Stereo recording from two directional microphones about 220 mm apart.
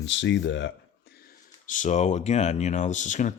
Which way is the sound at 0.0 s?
55° left (ahead or behind).